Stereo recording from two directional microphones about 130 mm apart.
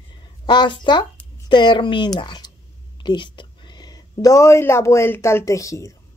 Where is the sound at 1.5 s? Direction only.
35° left (ahead or behind).